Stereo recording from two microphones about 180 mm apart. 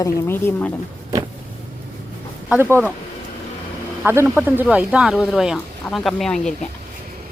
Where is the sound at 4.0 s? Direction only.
5° right (ahead or behind).